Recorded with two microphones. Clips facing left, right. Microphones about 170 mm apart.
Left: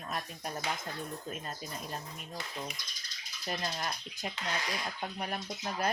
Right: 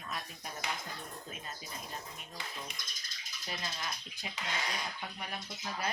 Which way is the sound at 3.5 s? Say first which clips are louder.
Left 5 dB; 50° left (ahead or behind).